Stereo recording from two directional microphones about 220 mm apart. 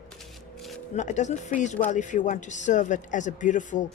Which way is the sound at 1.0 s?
30° left (ahead or behind).